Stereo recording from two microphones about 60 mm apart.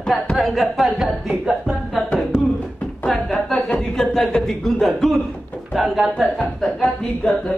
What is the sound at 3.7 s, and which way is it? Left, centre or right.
Chuckle, centre.